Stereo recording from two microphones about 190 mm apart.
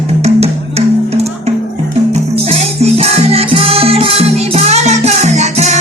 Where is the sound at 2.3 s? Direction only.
30° right (ahead or behind).